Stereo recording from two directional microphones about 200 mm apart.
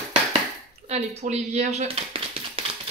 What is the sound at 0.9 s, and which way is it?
Tap, 35° right (ahead or behind).